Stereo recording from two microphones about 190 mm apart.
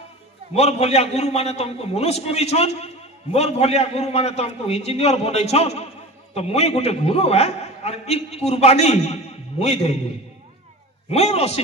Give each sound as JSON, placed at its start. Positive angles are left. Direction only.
{"t": 0.6, "sound": "a man's voice", "side_deg": 35}
{"t": 11.1, "sound": "a man's voice", "side_deg": 35}